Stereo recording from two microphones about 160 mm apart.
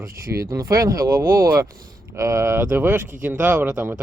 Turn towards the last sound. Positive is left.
turn(degrees=-10)  # may be behind; listen again after turning